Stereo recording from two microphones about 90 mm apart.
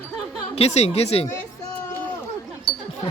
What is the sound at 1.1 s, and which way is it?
Speech, 90° left.